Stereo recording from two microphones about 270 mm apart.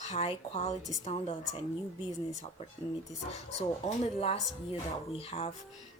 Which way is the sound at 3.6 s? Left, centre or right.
Left.